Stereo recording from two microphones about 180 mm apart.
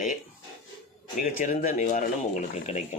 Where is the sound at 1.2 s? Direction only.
50° left (ahead or behind).